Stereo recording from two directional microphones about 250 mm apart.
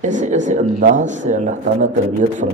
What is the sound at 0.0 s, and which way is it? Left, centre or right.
Speech, right.